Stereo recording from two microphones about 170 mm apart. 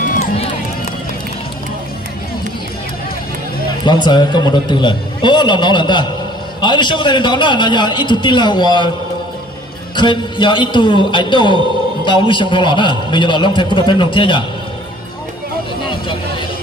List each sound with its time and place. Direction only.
0.0 s run: 55° left (ahead or behind)
3.8 s a man's voice: 25° left (ahead or behind)
9.9 s a man's voice: 25° left (ahead or behind)